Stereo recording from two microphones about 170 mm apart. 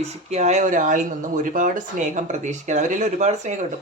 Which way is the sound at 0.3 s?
40° right (ahead or behind).